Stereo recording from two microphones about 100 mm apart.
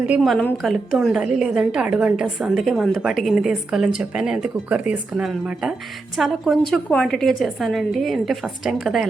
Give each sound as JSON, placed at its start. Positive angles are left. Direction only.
{"t": 0.2, "sound": "a woman's voice", "side_deg": 5}